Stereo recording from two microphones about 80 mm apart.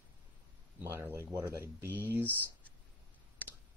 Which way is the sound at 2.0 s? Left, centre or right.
Right.